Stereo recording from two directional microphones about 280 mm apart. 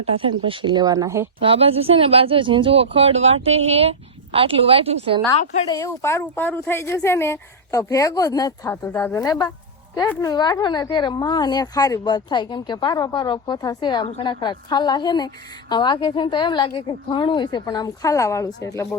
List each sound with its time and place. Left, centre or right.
0.0 s speech: centre
5.4 s speech: left
5.7 s speech: centre